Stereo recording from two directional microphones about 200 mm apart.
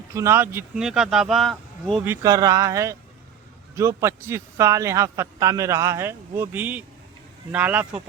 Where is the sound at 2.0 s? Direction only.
20° right (ahead or behind).